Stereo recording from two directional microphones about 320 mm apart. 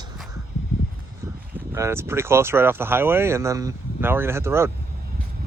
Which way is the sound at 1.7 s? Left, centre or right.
Centre.